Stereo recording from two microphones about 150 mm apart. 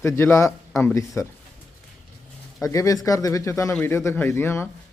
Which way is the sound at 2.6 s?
20° left (ahead or behind).